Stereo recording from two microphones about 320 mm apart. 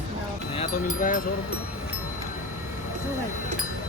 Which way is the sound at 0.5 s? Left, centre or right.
Left.